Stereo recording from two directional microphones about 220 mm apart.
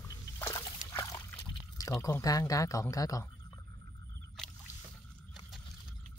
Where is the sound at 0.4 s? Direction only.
15° left (ahead or behind).